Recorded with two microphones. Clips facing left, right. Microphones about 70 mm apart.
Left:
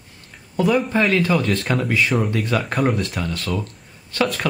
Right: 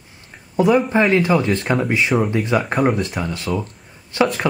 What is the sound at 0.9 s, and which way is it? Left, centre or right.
Speech, centre.